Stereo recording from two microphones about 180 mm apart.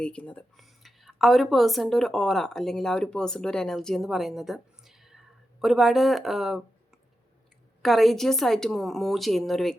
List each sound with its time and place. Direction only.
0.0 s speech: 5° left (ahead or behind)
7.8 s a woman's voice: centre (ahead or behind)